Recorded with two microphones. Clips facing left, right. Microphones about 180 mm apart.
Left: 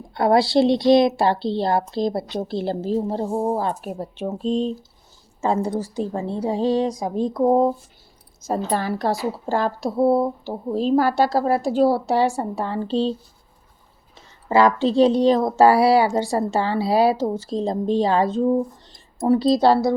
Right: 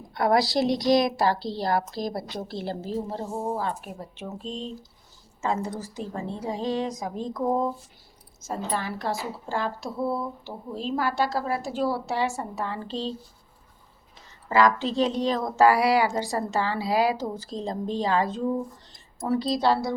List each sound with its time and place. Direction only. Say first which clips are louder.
0.1 s a woman's voice: left 5 dB; 25° left (ahead or behind)
14.5 s a woman's voice: left 5 dB; 30° left (ahead or behind)